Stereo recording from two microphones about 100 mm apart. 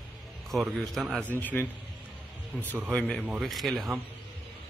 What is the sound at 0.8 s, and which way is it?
Speech, 5° left (ahead or behind).